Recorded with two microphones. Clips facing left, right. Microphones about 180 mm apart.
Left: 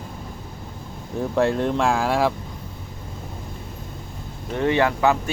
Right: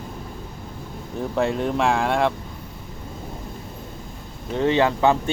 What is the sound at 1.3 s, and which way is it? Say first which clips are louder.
Speech: left 2 dB; centre (ahead or behind).